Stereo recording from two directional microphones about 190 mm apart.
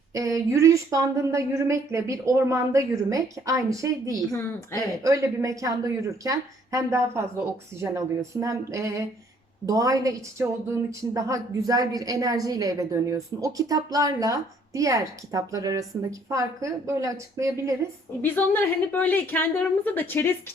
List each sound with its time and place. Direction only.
0.1 s a woman's voice: 15° right (ahead or behind)
18.2 s a woman's voice: 10° left (ahead or behind)